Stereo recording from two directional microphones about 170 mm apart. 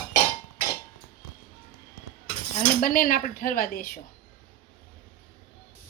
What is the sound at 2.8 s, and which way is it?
A woman's voice, 55° left (ahead or behind).